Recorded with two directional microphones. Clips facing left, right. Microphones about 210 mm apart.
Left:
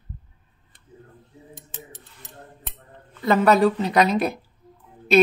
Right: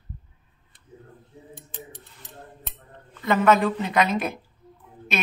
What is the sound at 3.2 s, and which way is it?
A woman's voice, 35° left (ahead or behind).